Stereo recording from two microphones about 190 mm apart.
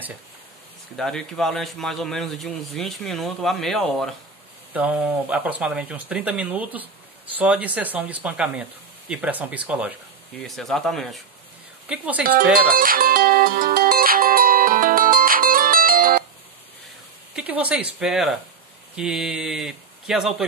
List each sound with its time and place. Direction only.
0.9 s a man's voice: centre (ahead or behind)
12.6 s music: 50° right (ahead or behind)
17.4 s a man's voice: 5° right (ahead or behind)